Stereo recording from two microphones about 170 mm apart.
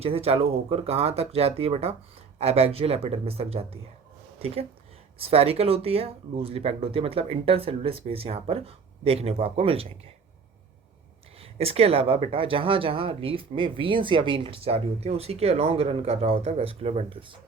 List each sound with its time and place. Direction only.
0.0 s speech: 35° right (ahead or behind)
11.3 s speech: 35° right (ahead or behind)